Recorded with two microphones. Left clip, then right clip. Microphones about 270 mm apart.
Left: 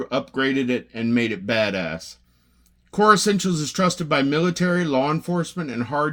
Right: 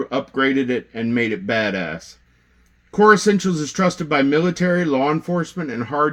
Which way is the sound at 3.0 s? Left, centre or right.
Left.